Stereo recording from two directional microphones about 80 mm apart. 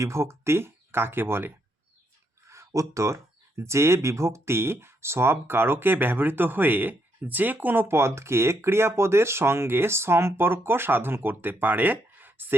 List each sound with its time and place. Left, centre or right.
0.0 s speech: right
2.5 s speech: right